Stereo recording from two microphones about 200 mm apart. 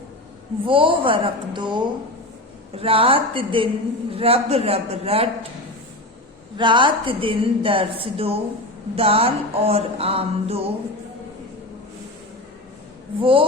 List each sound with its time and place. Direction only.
0.6 s a woman's voice: 25° right (ahead or behind)
6.6 s a woman's voice: 25° right (ahead or behind)
13.1 s a woman's voice: 25° right (ahead or behind)